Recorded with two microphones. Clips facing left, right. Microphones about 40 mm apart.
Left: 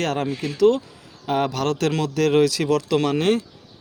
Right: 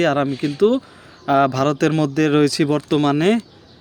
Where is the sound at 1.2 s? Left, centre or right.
Right.